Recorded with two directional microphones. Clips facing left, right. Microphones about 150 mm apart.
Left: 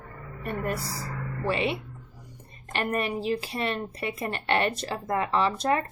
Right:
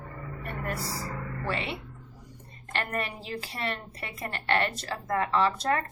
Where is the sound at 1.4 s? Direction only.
15° left (ahead or behind).